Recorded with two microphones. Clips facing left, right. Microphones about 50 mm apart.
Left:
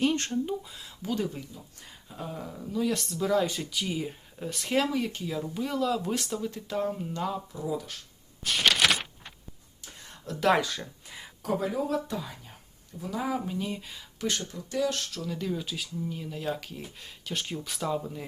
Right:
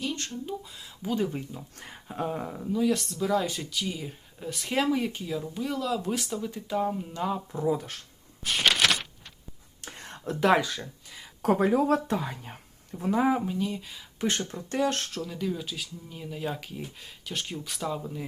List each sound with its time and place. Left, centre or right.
0.0 s a sound: left
0.4 s speech: centre
1.5 s speech: right
2.7 s speech: centre
7.5 s speech: right
8.4 s a sound: centre
8.9 s a sound: centre
9.8 s whispering: right
10.4 s speech: centre
11.4 s speech: right
13.0 s speech: right
13.5 s speech: centre
14.2 s speech: right
15.2 s speech: centre